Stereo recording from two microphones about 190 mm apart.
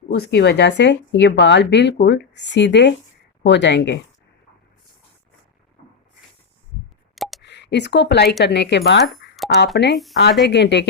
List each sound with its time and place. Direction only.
0.1 s speech: 60° left (ahead or behind)
7.2 s a sound: centre (ahead or behind)
7.4 s speech: 65° left (ahead or behind)